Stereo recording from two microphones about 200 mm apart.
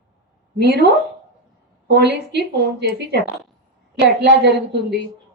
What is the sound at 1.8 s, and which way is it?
A woman's voice, 55° right (ahead or behind).